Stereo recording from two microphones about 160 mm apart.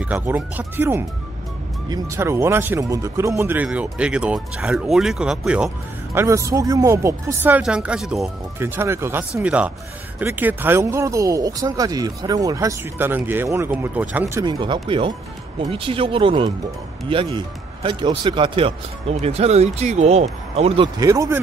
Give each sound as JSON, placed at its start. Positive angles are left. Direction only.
{"t": 0.0, "sound": "speech", "side_deg": -10}
{"t": 6.1, "sound": "speech", "side_deg": -20}
{"t": 8.5, "sound": "speech", "side_deg": -15}
{"t": 14.4, "sound": "speech", "side_deg": -30}
{"t": 21.0, "sound": "speech", "side_deg": -20}